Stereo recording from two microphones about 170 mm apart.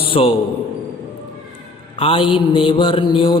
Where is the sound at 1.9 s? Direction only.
35° left (ahead or behind).